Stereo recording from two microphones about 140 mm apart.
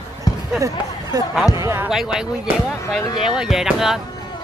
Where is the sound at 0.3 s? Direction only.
30° left (ahead or behind).